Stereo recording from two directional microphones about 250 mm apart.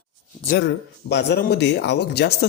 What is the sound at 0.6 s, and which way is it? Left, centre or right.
Speech, left.